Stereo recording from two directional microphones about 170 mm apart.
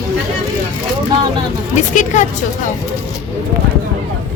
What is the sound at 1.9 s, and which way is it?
Speech, 50° left (ahead or behind).